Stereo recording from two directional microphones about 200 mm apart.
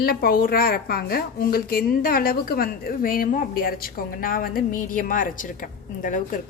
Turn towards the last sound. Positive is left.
turn(degrees=40)  # may be behind; listen again after turning